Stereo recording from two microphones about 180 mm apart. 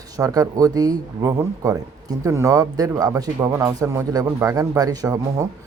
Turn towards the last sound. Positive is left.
turn(degrees=-20)  # may be behind; listen again after turning